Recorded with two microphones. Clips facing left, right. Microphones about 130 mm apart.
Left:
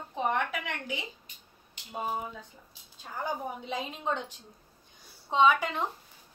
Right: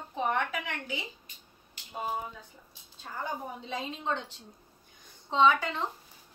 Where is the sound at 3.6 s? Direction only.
15° left (ahead or behind).